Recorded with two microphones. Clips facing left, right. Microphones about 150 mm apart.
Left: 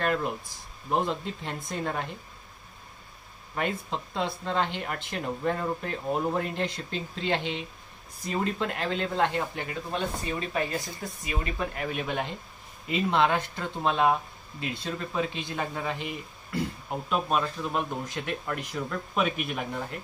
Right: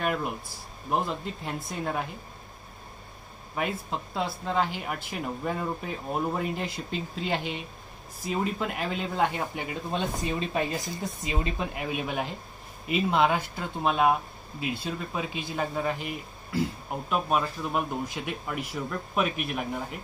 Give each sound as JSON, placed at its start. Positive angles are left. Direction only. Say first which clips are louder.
{"t": 0.0, "sound": "speech", "louder": "left 1 dB", "side_deg": -5}
{"t": 3.5, "sound": "speech", "louder": "even", "side_deg": -5}
{"t": 10.5, "sound": "speech", "louder": "right 1 dB", "side_deg": -20}